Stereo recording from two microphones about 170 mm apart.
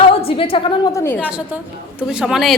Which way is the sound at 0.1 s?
35° left (ahead or behind).